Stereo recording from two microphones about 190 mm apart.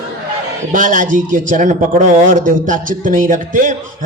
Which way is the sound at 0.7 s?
45° right (ahead or behind).